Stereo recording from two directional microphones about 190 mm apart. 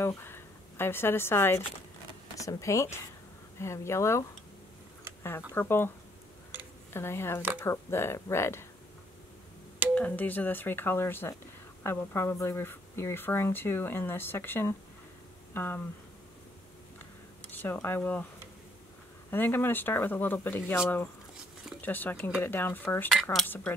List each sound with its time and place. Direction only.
0.0 s a woman's voice: 10° left (ahead or behind)
5.5 s speech: 10° left (ahead or behind)
6.9 s speech: 15° left (ahead or behind)
9.9 s speech: 10° left (ahead or behind)
17.5 s speech: 10° left (ahead or behind)
19.3 s speech: 10° left (ahead or behind)
21.8 s speech: 10° left (ahead or behind)